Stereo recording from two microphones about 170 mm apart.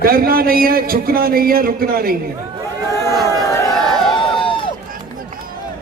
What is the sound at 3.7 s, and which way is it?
Crowd, centre (ahead or behind).